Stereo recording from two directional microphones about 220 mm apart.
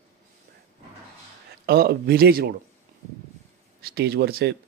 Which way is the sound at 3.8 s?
45° right (ahead or behind).